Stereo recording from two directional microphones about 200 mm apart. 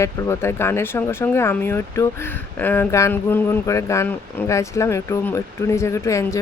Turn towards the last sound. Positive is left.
turn(degrees=15)  # may be behind; listen again after turning